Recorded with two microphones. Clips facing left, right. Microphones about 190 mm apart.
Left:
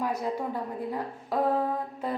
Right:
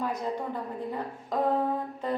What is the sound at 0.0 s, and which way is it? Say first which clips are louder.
A woman's voice: left 1 dB; 10° left (ahead or behind).